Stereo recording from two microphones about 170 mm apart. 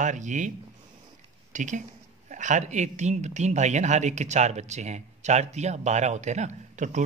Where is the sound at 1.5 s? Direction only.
45° right (ahead or behind).